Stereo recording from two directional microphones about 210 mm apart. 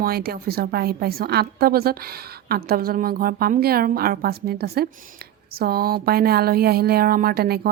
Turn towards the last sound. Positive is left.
turn(degrees=-45)  # may be behind; listen again after turning